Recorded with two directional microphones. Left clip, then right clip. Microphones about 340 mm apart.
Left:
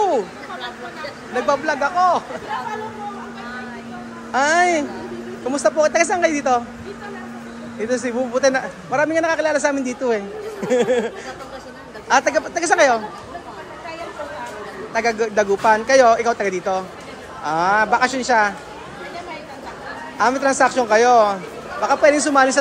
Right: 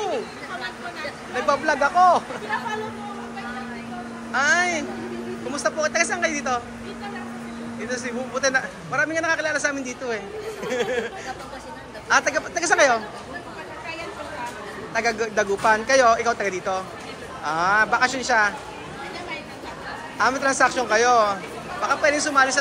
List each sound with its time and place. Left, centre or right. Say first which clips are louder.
1.3 s a man's voice: left 2 dB; centre
4.5 s speech: left 5 dB; centre
7.8 s a man's voice: left 8 dB; centre
12.1 s a man's voice: left 4 dB; centre
15.0 s a man's voice: left 5 dB; centre
20.2 s a man's voice: left 3 dB; centre